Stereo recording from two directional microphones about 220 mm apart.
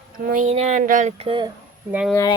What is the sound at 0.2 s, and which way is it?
Speech, 35° right (ahead or behind).